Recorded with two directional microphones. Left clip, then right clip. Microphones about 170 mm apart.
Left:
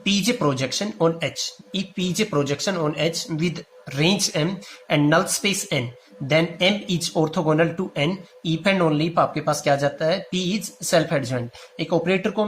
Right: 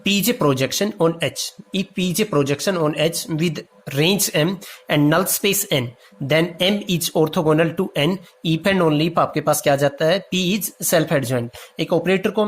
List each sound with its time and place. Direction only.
0.0 s speech: 50° right (ahead or behind)